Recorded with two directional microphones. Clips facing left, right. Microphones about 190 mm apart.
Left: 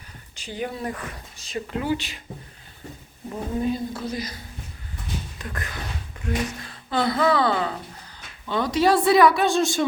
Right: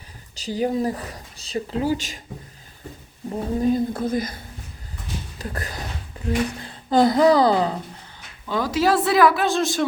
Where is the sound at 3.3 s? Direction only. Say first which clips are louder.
Right 4 dB; 40° right (ahead or behind).